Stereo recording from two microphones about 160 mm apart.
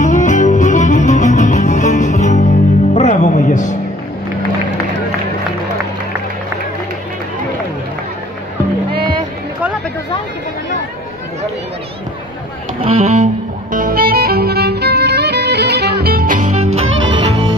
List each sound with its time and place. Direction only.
0.0 s music: 50° left (ahead or behind)
8.9 s music: 30° right (ahead or behind)
12.8 s music: 45° right (ahead or behind)